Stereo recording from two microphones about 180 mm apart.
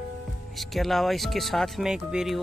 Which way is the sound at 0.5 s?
Centre (ahead or behind).